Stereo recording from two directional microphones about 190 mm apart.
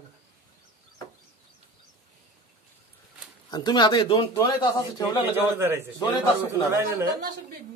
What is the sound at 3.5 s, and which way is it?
A man's voice, 20° left (ahead or behind).